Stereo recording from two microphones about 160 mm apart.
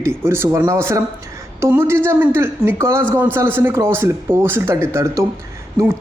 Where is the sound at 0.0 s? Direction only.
15° right (ahead or behind).